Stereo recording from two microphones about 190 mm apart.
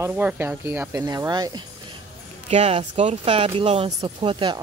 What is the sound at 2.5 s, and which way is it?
Speech, 35° right (ahead or behind).